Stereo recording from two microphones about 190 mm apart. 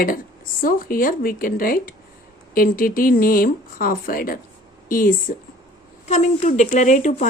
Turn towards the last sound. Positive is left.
turn(degrees=40)  # may be behind; listen again after turning